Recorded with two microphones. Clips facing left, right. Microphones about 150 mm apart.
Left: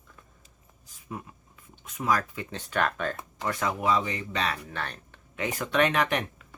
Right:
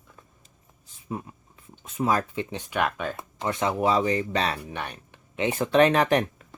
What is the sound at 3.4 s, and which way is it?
Speech, 20° right (ahead or behind).